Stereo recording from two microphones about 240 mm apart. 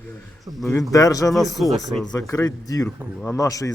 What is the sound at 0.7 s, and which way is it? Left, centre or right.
Speech, centre.